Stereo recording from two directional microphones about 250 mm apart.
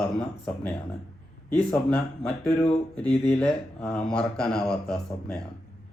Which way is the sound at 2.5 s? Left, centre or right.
Left.